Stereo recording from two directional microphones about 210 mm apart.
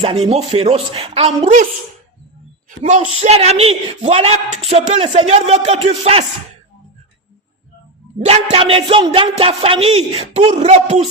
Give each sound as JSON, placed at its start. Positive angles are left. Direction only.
{"t": 0.0, "sound": "speech", "side_deg": -30}
{"t": 2.6, "sound": "a woman's voice", "side_deg": -35}
{"t": 8.5, "sound": "speech", "side_deg": -25}